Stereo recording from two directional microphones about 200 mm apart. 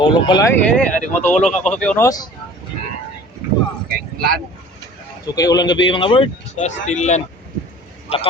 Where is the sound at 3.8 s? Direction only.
50° right (ahead or behind).